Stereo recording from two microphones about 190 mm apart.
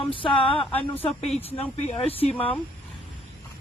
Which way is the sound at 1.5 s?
30° left (ahead or behind).